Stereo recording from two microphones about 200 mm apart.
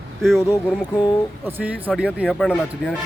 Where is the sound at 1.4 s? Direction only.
10° right (ahead or behind).